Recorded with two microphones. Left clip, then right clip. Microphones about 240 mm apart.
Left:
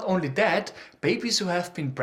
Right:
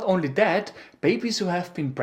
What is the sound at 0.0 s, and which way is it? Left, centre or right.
Speech, centre.